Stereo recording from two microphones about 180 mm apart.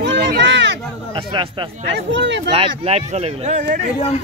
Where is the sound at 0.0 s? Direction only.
70° right (ahead or behind).